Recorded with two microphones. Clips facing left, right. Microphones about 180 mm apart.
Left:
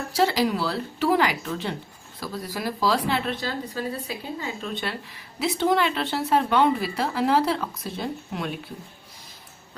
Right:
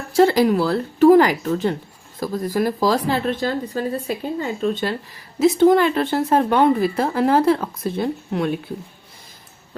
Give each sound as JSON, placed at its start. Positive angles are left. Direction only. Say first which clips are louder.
{"t": 0.1, "sound": "speech", "louder": "right 8 dB", "side_deg": -50}